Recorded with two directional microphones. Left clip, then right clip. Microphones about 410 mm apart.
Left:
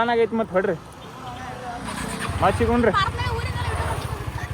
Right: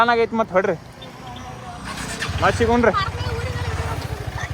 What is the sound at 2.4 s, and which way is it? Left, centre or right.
Speech, centre.